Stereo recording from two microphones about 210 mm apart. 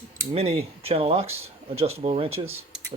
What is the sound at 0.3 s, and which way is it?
Speech, 30° right (ahead or behind).